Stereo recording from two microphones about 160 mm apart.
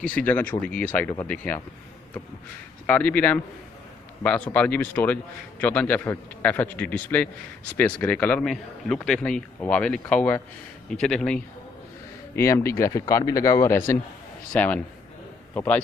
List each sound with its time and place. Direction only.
0.0 s a man's voice: 10° left (ahead or behind)
2.9 s a man's voice: 10° left (ahead or behind)
4.5 s a man's voice: 10° left (ahead or behind)
12.4 s a man's voice: 15° left (ahead or behind)